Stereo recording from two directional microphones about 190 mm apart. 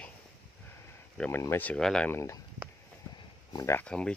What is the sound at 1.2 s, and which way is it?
Speech, 10° left (ahead or behind).